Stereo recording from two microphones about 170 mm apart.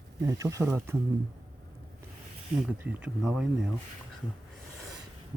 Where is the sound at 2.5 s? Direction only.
5° right (ahead or behind).